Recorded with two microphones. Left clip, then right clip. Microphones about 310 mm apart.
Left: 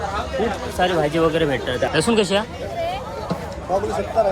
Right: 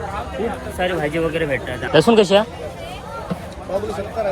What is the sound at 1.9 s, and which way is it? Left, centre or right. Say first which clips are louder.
Speech: right 8 dB; centre.